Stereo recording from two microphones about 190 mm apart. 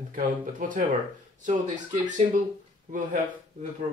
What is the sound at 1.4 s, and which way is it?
Speech, 40° right (ahead or behind).